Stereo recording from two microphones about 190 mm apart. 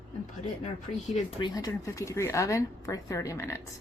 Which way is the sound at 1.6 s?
15° left (ahead or behind).